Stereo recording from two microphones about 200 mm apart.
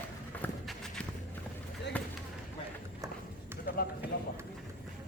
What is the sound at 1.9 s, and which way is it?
Basketball bounce, 5° left (ahead or behind).